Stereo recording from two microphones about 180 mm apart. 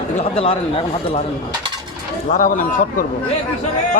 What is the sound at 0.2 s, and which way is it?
Speech, 30° left (ahead or behind).